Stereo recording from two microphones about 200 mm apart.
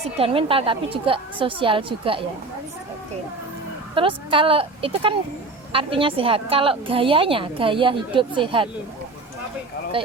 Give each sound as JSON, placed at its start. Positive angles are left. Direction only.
{"t": 0.2, "sound": "a woman's voice", "side_deg": -25}
{"t": 3.9, "sound": "a woman's voice", "side_deg": -25}